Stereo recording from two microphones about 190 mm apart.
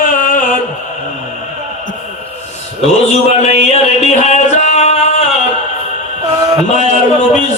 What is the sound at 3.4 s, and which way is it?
Music, 35° left (ahead or behind).